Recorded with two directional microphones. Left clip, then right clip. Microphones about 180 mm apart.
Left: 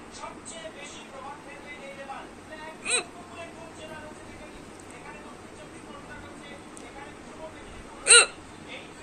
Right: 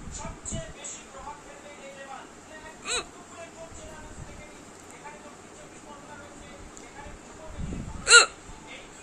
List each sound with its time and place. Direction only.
2.8 s whimper: 15° right (ahead or behind)
8.0 s hiccup: 10° right (ahead or behind)